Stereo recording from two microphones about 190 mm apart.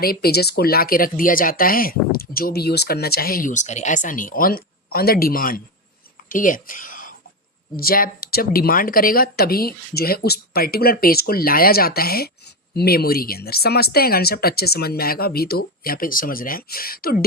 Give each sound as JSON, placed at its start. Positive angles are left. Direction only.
{"t": 0.0, "sound": "speech", "side_deg": 55}